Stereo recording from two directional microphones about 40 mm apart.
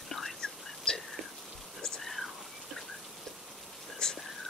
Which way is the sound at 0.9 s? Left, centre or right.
Centre.